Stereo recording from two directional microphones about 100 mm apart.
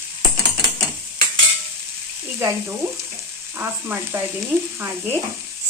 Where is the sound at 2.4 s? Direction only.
25° right (ahead or behind).